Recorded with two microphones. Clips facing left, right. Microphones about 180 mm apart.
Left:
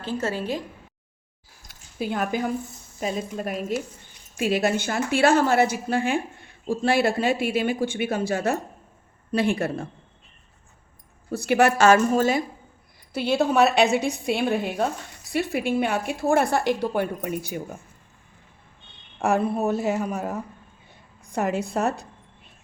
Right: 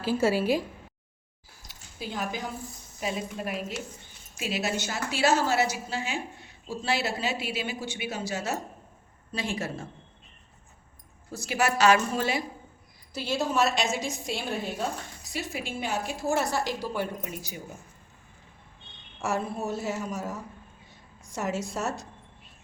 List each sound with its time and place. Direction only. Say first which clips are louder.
0.0 s a woman's voice: right 3 dB; 10° right (ahead or behind)
1.6 s a sound: left 9 dB; 55° left (ahead or behind)
3.0 s a woman's voice: left 4 dB; 45° left (ahead or behind)
11.3 s a woman's voice: left 8 dB; 60° left (ahead or behind); by 12.4 s 45° left (ahead or behind)
13.1 s a woman's voice: left 7 dB; 60° left (ahead or behind)
19.2 s a woman's voice: left 8 dB; 60° left (ahead or behind)